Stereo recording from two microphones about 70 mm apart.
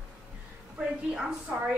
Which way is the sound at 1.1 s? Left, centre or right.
Centre.